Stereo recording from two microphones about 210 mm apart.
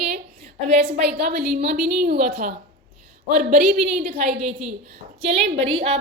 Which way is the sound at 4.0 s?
30° right (ahead or behind).